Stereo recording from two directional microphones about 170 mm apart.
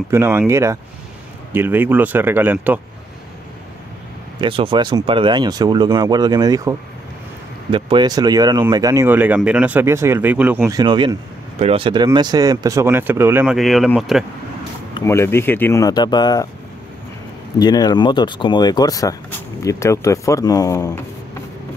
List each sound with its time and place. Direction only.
0.1 s speech: 15° right (ahead or behind)
4.4 s speech: 30° right (ahead or behind); by 10.8 s 10° right (ahead or behind)
10.8 s speech: 25° right (ahead or behind)
13.6 s speech: centre (ahead or behind)
15.0 s speech: 15° left (ahead or behind)
17.6 s speech: 25° left (ahead or behind)